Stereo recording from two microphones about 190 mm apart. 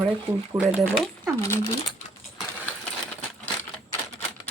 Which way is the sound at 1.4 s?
15° left (ahead or behind).